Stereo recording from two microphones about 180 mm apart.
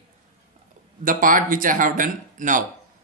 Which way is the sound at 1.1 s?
50° right (ahead or behind).